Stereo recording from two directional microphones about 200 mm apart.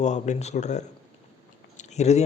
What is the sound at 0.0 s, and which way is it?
A man's voice, 35° left (ahead or behind).